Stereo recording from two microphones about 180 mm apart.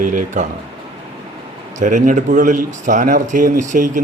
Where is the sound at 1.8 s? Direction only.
45° right (ahead or behind).